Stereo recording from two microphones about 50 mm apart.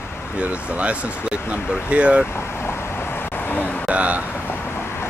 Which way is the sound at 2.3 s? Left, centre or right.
Left.